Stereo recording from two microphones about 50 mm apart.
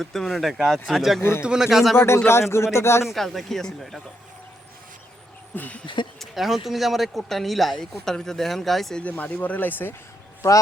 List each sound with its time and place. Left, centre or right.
0.0 s speech: centre
1.2 s speech: left
1.5 s speech: centre
2.0 s speech: left
3.1 s speech: centre
5.5 s speech: left
6.1 s speech: centre
9.1 s speech: left